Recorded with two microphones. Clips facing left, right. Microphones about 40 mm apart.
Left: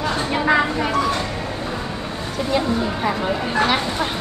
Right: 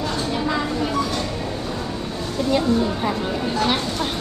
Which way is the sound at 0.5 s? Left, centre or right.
Left.